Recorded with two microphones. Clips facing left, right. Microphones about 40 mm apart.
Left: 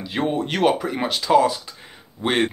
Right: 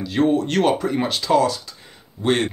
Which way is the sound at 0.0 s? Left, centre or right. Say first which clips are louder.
Right 4 dB; centre.